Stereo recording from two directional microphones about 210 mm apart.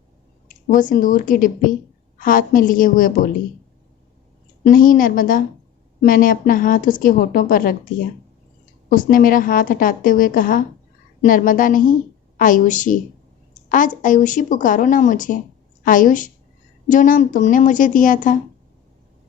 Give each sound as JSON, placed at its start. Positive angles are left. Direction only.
{"t": 0.4, "sound": "speech", "side_deg": 40}
{"t": 4.7, "sound": "speech", "side_deg": 40}